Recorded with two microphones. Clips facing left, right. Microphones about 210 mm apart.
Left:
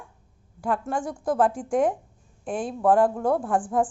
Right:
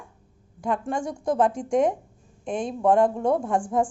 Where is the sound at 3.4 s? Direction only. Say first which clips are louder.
Even; 5° left (ahead or behind).